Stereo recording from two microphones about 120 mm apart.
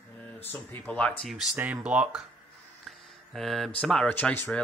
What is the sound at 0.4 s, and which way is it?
Speech, 15° left (ahead or behind).